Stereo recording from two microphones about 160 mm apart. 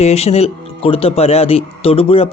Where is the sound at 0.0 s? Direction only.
40° left (ahead or behind).